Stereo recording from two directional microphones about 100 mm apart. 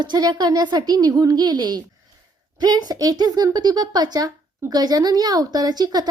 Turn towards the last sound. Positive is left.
turn(degrees=-40)  # may be behind; listen again after turning